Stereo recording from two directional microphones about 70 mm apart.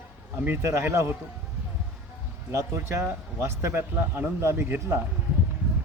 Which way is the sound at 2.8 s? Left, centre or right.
Right.